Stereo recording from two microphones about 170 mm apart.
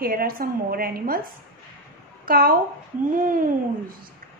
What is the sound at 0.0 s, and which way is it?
Speech, 60° right (ahead or behind).